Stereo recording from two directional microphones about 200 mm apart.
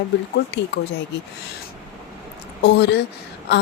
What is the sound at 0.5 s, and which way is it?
Speech, 60° left (ahead or behind).